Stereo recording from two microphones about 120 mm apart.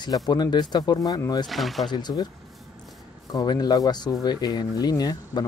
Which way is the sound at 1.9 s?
35° left (ahead or behind).